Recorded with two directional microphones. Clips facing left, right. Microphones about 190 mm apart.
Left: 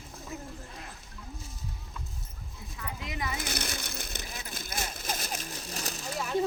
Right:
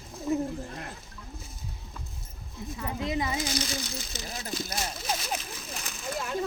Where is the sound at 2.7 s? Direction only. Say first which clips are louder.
Right 8 dB; 30° right (ahead or behind).